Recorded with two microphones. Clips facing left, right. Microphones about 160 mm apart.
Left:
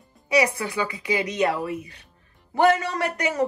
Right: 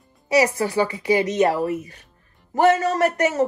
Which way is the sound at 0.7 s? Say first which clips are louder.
Right 6 dB; 35° right (ahead or behind).